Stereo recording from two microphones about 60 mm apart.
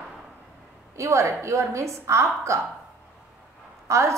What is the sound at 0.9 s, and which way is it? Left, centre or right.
A woman's voice, right.